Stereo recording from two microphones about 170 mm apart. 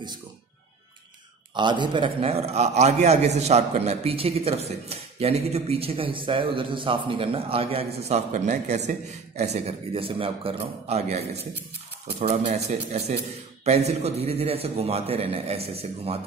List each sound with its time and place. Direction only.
1.5 s a man's voice: 25° right (ahead or behind)